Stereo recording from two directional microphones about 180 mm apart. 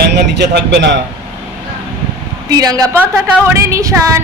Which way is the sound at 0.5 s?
70° right (ahead or behind).